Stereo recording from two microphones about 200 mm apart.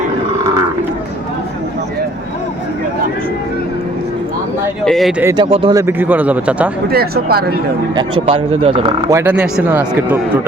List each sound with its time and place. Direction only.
4.9 s speech: centre (ahead or behind)
5.2 s speech: 20° right (ahead or behind)
5.7 s speech: 10° right (ahead or behind)
6.9 s speech: 50° right (ahead or behind)
8.6 s speech: 30° right (ahead or behind)
9.0 s speech: 10° right (ahead or behind)